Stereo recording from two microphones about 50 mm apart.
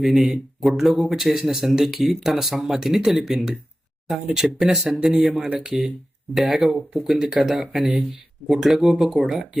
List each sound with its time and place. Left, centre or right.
0.0 s speech: centre
5.0 s speech: centre